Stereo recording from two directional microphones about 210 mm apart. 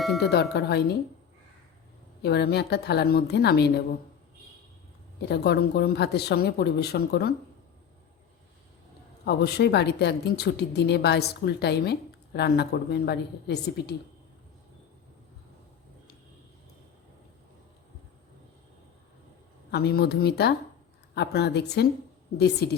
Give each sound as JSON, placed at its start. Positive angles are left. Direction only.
{"t": 0.2, "sound": "a woman's voice", "side_deg": 50}
{"t": 2.2, "sound": "a woman's voice", "side_deg": 50}
{"t": 5.3, "sound": "a woman's voice", "side_deg": 50}
{"t": 9.2, "sound": "a woman's voice", "side_deg": 50}
{"t": 19.7, "sound": "a woman's voice", "side_deg": 50}